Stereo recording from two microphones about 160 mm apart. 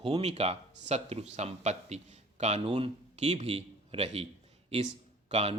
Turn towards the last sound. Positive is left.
turn(degrees=-45)  # may be behind; listen again after turning